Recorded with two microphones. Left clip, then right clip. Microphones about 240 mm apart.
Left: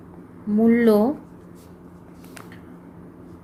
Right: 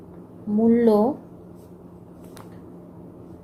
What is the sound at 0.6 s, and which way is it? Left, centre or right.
Speech, left.